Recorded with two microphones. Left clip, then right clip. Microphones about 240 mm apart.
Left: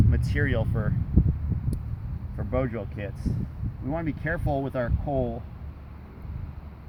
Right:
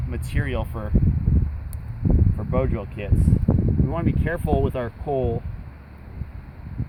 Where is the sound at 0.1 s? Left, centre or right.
Centre.